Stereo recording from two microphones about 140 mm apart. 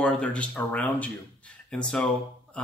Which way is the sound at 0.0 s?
10° left (ahead or behind).